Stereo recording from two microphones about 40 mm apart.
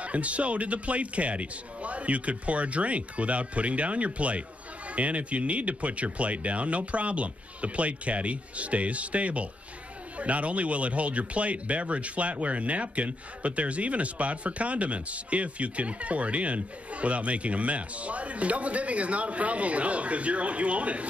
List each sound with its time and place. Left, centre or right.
0.0 s speech: right